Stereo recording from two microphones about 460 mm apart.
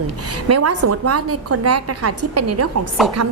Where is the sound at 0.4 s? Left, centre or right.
Right.